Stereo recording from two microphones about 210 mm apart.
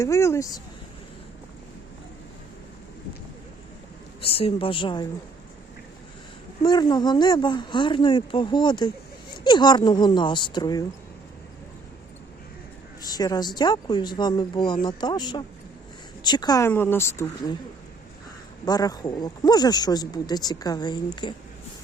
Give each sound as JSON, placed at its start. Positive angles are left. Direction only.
{"t": 0.0, "sound": "speech", "side_deg": 15}
{"t": 4.2, "sound": "speech", "side_deg": 25}
{"t": 6.6, "sound": "speech", "side_deg": 20}
{"t": 13.0, "sound": "speech", "side_deg": 20}
{"t": 18.6, "sound": "speech", "side_deg": 20}